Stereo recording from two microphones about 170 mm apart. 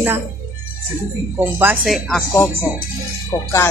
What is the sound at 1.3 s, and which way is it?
Speech, 10° right (ahead or behind).